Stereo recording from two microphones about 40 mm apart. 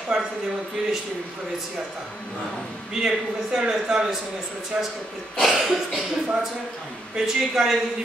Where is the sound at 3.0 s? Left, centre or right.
Centre.